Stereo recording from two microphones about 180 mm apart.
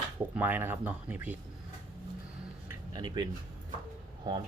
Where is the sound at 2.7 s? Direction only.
25° right (ahead or behind).